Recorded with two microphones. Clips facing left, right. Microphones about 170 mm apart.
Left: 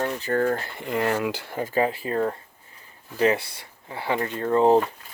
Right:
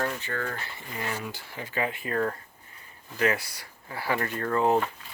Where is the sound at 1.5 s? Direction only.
40° left (ahead or behind); by 4.6 s 20° left (ahead or behind).